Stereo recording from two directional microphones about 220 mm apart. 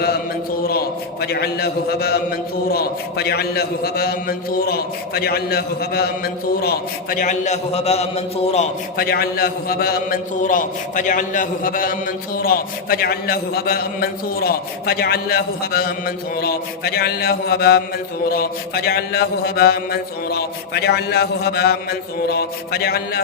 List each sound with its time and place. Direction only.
0.6 s a man's voice: 45° left (ahead or behind)
9.0 s a man's voice: 45° left (ahead or behind)